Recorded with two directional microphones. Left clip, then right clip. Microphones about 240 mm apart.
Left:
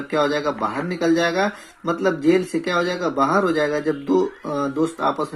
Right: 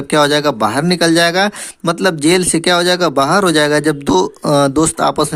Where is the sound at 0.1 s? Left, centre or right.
Right.